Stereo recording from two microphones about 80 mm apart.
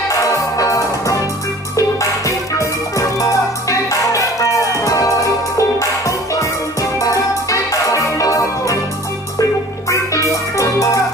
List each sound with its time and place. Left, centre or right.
0.1 s music: left
1.8 s steelpan: left
6.8 s music: left